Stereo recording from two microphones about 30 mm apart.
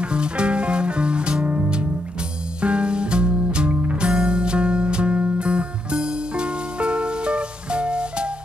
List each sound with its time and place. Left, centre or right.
0.0 s music: right
1.4 s music: right
2.6 s music: right